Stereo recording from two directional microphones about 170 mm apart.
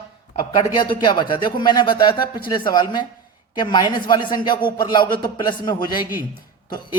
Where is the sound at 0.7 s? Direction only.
25° left (ahead or behind).